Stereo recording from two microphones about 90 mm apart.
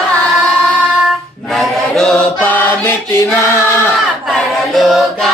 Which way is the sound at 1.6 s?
5° left (ahead or behind).